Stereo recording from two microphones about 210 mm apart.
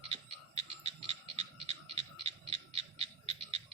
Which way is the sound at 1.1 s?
30° right (ahead or behind).